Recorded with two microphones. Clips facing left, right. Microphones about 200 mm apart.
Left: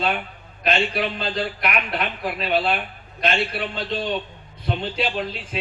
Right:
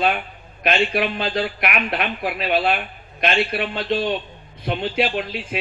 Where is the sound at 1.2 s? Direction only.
60° right (ahead or behind).